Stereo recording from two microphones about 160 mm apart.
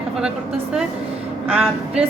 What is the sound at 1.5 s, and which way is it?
Speech, 10° right (ahead or behind).